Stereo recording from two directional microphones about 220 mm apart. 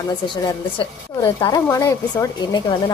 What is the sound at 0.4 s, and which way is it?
Speech, 20° left (ahead or behind).